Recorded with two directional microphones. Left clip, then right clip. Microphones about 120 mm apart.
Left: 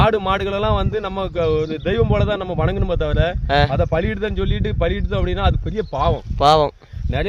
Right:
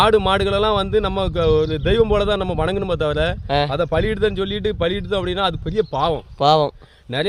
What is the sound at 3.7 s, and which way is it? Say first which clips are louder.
Speech: right 1 dB; 30° right (ahead or behind).